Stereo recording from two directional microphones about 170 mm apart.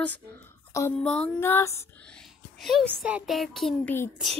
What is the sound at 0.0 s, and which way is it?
A woman's voice, 10° left (ahead or behind).